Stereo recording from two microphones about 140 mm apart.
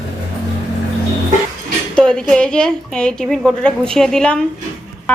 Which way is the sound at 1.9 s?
5° left (ahead or behind).